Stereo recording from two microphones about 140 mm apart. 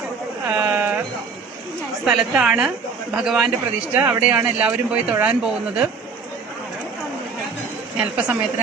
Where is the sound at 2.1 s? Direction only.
5° right (ahead or behind).